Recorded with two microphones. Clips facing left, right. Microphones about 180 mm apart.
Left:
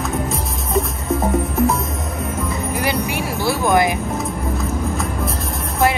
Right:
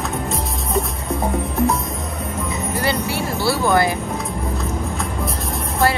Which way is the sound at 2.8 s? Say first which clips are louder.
Even; 15° left (ahead or behind).